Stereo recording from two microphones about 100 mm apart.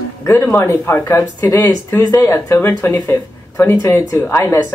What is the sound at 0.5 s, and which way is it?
Speech, 25° left (ahead or behind).